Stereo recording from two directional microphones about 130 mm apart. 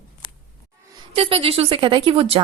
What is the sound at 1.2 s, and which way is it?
A woman's voice, 45° right (ahead or behind).